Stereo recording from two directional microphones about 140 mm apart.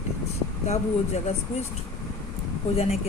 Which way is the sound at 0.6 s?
55° left (ahead or behind).